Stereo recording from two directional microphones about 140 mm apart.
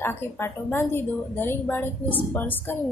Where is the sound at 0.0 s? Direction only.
15° left (ahead or behind).